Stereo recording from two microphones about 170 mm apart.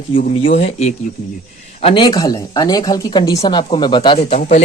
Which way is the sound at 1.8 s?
25° left (ahead or behind).